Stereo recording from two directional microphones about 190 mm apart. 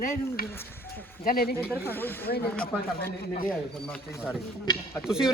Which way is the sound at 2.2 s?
55° left (ahead or behind).